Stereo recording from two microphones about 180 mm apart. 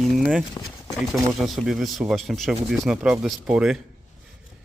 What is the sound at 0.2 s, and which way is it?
Speech, 5° right (ahead or behind).